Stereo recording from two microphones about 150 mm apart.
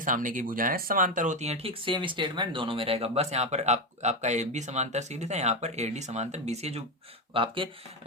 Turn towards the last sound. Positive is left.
turn(degrees=-35)  # may be behind; listen again after turning